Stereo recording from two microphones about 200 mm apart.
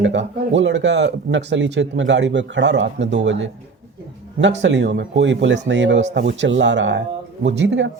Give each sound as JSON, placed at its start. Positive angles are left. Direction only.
{"t": 0.0, "sound": "speech", "side_deg": -65}